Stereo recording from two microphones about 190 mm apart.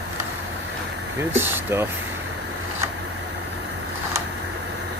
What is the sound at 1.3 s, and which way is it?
Speech, 10° right (ahead or behind).